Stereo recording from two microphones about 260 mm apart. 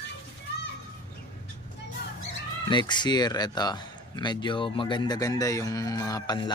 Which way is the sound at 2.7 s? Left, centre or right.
Centre.